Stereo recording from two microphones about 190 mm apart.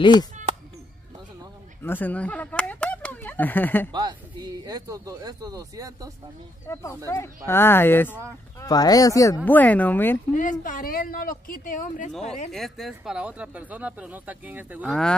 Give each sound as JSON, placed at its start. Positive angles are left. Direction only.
{"t": 0.0, "sound": "speech", "side_deg": 25}
{"t": 1.8, "sound": "speech", "side_deg": 10}
{"t": 3.9, "sound": "speech", "side_deg": -20}
{"t": 6.7, "sound": "speech", "side_deg": 15}
{"t": 10.3, "sound": "speech", "side_deg": 45}
{"t": 12.4, "sound": "speech", "side_deg": 0}